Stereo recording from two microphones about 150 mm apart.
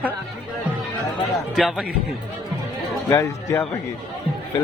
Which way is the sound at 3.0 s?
15° left (ahead or behind).